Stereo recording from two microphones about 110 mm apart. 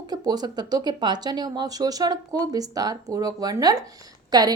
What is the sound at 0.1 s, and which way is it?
A woman's voice, 35° right (ahead or behind).